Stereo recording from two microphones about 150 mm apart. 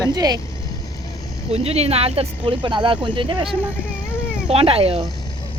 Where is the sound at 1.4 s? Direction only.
40° right (ahead or behind).